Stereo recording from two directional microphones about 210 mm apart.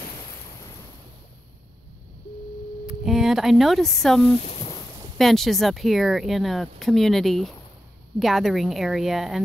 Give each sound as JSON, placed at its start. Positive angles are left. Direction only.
{"t": 2.9, "sound": "speech", "side_deg": 0}
{"t": 4.4, "sound": "boat", "side_deg": 30}
{"t": 5.1, "sound": "speech", "side_deg": 0}